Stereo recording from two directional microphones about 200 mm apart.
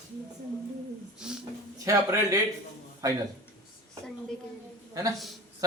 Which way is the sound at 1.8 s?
15° right (ahead or behind).